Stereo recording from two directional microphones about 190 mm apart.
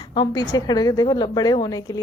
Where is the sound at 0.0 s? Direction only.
25° left (ahead or behind).